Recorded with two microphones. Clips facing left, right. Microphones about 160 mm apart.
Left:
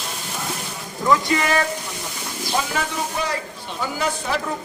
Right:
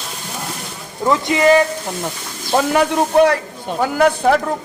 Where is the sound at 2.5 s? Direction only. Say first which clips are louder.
Right 10 dB; 60° right (ahead or behind).